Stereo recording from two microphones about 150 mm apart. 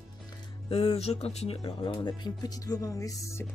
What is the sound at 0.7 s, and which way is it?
Speech, 40° left (ahead or behind).